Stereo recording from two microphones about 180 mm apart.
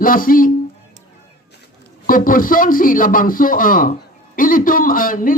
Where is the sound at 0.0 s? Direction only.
50° left (ahead or behind).